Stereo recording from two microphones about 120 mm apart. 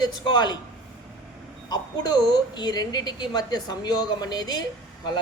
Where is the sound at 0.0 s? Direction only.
35° left (ahead or behind).